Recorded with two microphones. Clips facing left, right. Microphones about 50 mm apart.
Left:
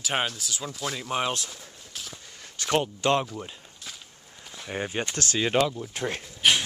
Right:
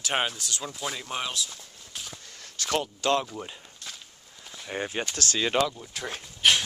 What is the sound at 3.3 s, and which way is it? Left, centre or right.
Walk, centre.